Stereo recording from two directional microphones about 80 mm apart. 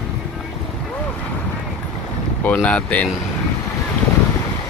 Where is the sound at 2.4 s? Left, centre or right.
Centre.